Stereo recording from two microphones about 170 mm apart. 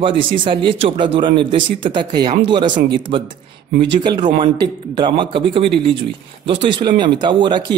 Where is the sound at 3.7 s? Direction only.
85° right.